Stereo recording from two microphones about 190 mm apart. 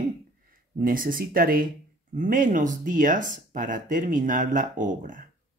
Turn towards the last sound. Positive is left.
turn(degrees=-45)  # may be behind; listen again after turning